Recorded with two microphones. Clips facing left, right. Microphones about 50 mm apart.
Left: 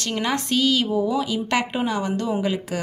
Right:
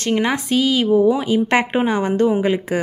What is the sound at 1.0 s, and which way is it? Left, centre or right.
Speech, right.